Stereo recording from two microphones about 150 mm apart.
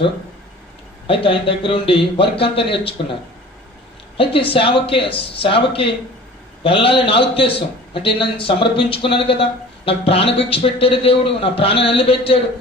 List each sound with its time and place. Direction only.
1.0 s a man's voice: 35° left (ahead or behind)
4.5 s a man's voice: 35° left (ahead or behind)